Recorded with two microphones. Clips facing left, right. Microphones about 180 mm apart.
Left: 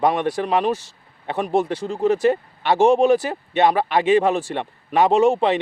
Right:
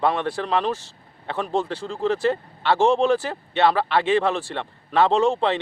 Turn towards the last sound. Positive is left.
turn(degrees=15)  # may be behind; listen again after turning